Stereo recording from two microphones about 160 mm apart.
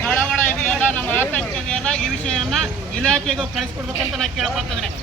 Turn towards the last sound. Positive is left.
turn(degrees=0)  # may be behind; listen again after turning